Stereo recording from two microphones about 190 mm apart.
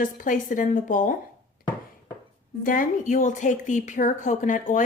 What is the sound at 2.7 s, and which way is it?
A woman's voice, 45° left (ahead or behind).